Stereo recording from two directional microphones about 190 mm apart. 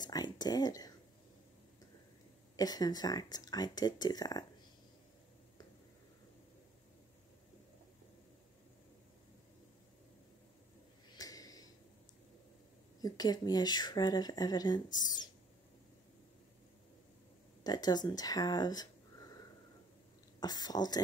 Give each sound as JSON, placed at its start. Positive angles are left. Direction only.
{"t": 0.0, "sound": "a sound", "side_deg": 20}
{"t": 2.5, "sound": "speech", "side_deg": 20}
{"t": 11.1, "sound": "a sound", "side_deg": 20}
{"t": 13.0, "sound": "speech", "side_deg": 20}
{"t": 17.6, "sound": "speech", "side_deg": 20}
{"t": 20.3, "sound": "speech", "side_deg": 20}